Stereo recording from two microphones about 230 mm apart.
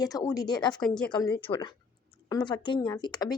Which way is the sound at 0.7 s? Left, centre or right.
Centre.